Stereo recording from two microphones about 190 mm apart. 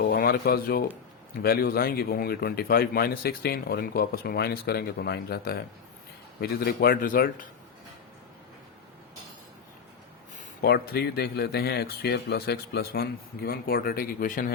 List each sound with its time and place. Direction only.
0.1 s a sound: 50° left (ahead or behind)
0.3 s speech: 55° left (ahead or behind)
10.3 s speech: 55° left (ahead or behind)